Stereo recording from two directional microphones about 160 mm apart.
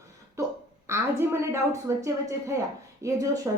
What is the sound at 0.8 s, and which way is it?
A woman's voice, 15° right (ahead or behind).